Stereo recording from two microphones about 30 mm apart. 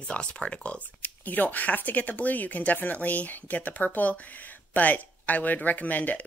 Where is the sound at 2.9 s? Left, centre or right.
Left.